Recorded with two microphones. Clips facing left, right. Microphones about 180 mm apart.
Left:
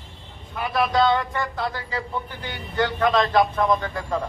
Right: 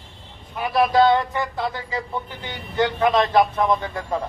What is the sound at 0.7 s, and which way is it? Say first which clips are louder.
A man's voice: right 4 dB; 20° right (ahead or behind).